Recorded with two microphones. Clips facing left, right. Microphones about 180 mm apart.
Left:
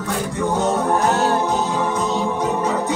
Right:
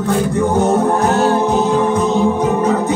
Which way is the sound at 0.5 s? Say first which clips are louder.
Right 3 dB; 50° right (ahead or behind).